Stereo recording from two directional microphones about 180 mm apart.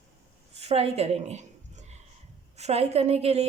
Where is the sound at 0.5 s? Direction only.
35° right (ahead or behind).